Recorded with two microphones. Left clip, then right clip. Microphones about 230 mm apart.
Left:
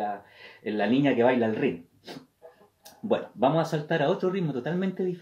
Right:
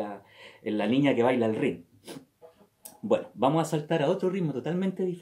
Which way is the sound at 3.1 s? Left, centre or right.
Centre.